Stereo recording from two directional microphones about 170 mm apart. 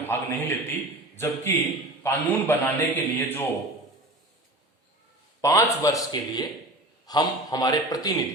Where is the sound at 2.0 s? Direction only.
15° left (ahead or behind).